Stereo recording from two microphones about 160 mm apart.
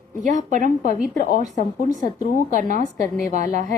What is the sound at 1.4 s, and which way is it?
A woman's voice, 50° right (ahead or behind).